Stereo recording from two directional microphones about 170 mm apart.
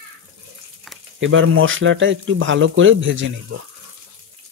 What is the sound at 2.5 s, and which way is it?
Speech, 90° right.